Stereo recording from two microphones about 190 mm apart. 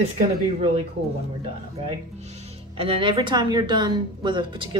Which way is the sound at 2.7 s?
30° right (ahead or behind).